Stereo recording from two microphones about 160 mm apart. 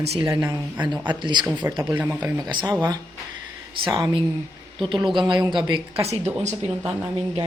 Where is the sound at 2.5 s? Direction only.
30° right (ahead or behind).